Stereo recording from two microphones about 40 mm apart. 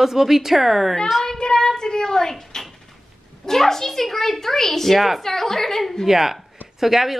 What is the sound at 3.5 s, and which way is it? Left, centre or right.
A child's voice, centre.